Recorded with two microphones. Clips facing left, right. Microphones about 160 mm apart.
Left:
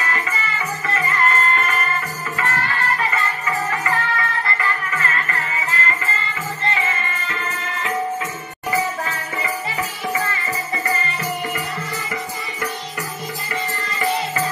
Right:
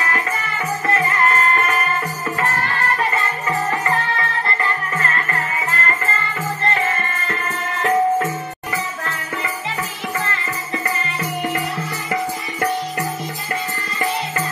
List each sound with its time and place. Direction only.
0.8 s music: 45° right (ahead or behind)
3.8 s music: 25° right (ahead or behind)
5.7 s music: 45° right (ahead or behind)